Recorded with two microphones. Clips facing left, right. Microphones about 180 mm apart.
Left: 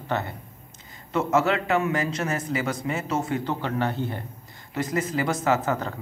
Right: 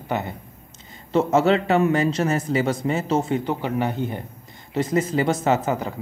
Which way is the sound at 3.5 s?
15° right (ahead or behind).